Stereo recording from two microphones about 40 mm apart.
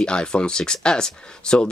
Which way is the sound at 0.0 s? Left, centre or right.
Left.